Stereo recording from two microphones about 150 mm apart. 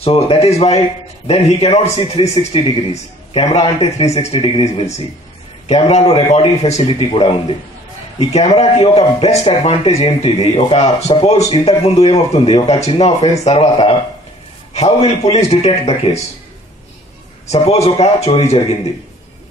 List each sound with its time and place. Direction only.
0.0 s a man's voice: 40° left (ahead or behind)
5.9 s a man's voice: 40° left (ahead or behind)
17.5 s speech: 45° left (ahead or behind)